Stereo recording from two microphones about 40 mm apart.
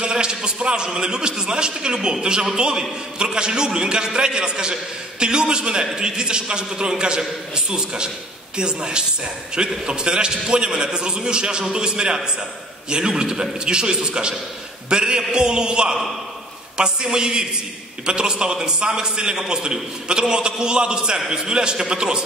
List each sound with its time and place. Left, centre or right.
0.0 s a man's voice: right